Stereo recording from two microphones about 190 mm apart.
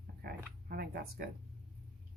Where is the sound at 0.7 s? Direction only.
55° right (ahead or behind).